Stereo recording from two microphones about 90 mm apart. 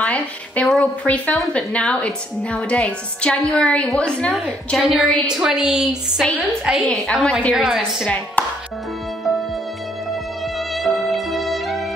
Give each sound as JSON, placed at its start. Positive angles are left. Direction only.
{"t": 0.0, "sound": "a sound", "side_deg": 15}
{"t": 0.7, "sound": "a woman's voice", "side_deg": 15}
{"t": 4.7, "sound": "a woman's voice", "side_deg": 0}
{"t": 10.7, "sound": "music", "side_deg": 0}